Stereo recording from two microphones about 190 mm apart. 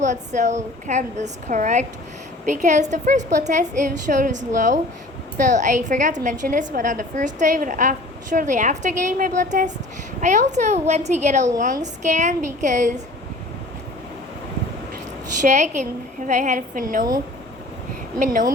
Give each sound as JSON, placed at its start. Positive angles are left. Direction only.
{"t": 0.0, "sound": "a woman's voice", "side_deg": -40}
{"t": 15.4, "sound": "a woman's voice", "side_deg": -40}